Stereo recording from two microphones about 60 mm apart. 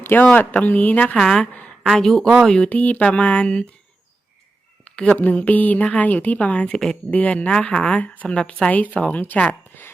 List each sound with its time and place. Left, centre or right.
0.0 s speech: left
1.1 s a woman's voice: centre
2.6 s speech: left
4.9 s a sound: centre
5.1 s speech: left